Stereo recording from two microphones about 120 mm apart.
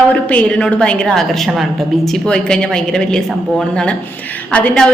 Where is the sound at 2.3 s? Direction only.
5° left (ahead or behind).